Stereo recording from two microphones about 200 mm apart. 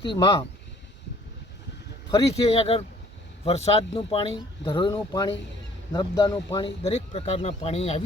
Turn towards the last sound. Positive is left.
turn(degrees=30)  # may be behind; listen again after turning